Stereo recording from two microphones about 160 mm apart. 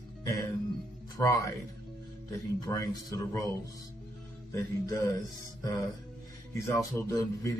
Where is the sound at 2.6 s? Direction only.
20° left (ahead or behind).